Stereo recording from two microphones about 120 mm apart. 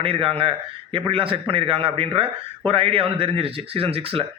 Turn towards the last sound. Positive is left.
turn(degrees=-50)  # may be behind; listen again after turning